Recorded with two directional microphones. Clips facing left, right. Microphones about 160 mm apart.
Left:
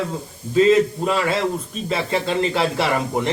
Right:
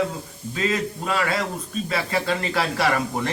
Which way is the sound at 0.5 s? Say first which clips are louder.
Left 10 dB; 25° left (ahead or behind).